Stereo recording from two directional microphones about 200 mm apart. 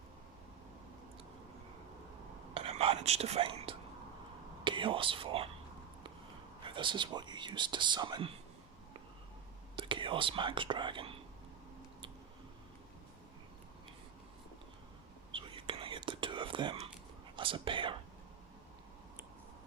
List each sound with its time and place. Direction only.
2.6 s whispering: 30° right (ahead or behind)
4.6 s speech: 25° right (ahead or behind)
6.6 s speech: 25° right (ahead or behind)
9.7 s speech: 25° right (ahead or behind)
15.3 s whispering: 25° right (ahead or behind)